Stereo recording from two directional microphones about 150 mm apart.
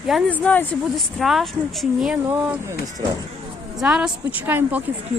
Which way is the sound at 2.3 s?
15° right (ahead or behind).